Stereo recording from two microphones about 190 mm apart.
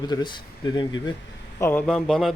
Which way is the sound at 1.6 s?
10° left (ahead or behind).